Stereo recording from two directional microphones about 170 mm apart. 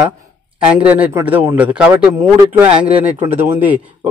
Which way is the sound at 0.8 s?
10° right (ahead or behind).